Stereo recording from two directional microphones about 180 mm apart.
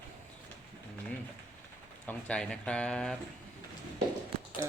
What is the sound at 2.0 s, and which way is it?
Speech, 5° left (ahead or behind).